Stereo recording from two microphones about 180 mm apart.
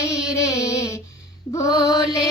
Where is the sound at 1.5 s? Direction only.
20° left (ahead or behind).